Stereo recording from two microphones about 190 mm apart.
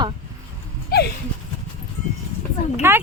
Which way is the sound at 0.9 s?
55° left (ahead or behind).